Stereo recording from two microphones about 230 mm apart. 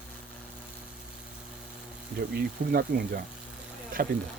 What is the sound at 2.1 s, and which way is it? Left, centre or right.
Speech, right.